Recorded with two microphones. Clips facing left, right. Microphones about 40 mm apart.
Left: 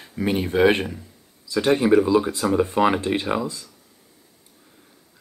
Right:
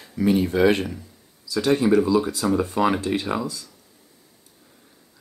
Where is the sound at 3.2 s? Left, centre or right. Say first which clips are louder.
Left 2 dB; centre.